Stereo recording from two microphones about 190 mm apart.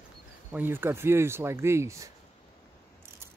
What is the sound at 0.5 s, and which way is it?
Speech, 10° right (ahead or behind).